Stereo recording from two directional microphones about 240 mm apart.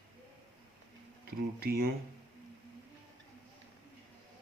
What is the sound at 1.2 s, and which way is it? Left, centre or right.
Speech, right.